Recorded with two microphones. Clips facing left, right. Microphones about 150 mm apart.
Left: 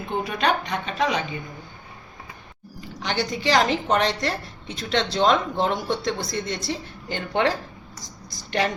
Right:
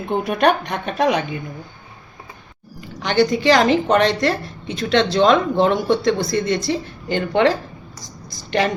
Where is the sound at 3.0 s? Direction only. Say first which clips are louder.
Right 10 dB; 60° right (ahead or behind).